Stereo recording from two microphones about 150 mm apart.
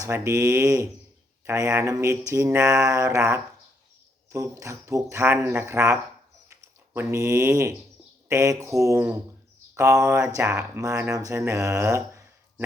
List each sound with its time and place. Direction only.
0.0 s speech: 20° right (ahead or behind)